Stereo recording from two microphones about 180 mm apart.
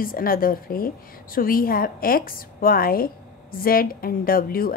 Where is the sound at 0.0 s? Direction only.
55° left (ahead or behind).